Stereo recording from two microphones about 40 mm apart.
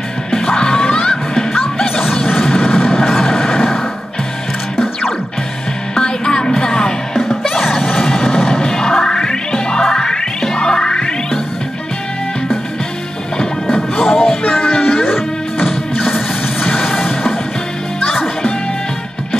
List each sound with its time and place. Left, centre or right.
0.5 s music: centre
5.9 s music: centre
7.5 s music: centre
8.6 s music: centre
14.0 s music: centre
16.6 s music: centre